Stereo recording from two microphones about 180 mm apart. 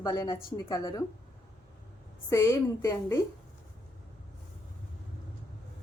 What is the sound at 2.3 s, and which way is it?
Speech, 15° left (ahead or behind).